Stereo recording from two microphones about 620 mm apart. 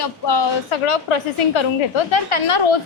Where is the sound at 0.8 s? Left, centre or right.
Left.